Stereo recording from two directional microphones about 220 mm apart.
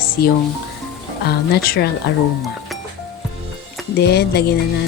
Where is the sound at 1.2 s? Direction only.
45° left (ahead or behind).